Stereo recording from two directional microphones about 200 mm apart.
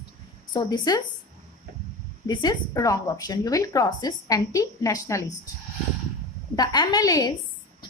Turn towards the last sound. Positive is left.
turn(degrees=20)  # may be behind; listen again after turning